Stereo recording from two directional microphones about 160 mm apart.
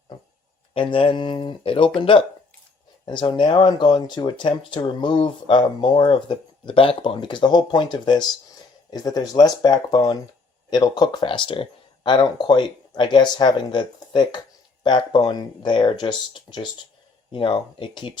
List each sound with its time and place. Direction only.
0.7 s speech: 30° left (ahead or behind)